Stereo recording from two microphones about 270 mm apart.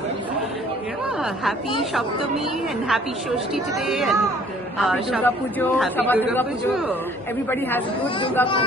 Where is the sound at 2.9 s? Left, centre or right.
Centre.